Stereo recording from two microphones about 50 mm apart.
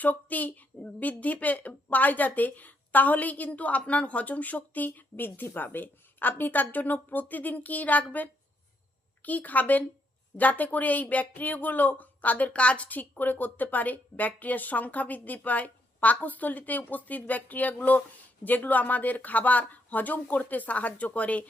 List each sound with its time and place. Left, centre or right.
0.0 s speech: left